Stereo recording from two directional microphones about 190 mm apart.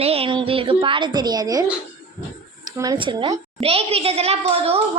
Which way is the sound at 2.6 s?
20° right (ahead or behind).